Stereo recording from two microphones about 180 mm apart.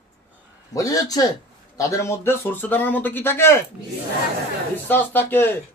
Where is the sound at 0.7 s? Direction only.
20° left (ahead or behind).